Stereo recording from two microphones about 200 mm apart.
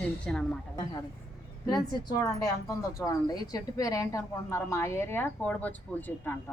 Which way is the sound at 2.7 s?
15° left (ahead or behind).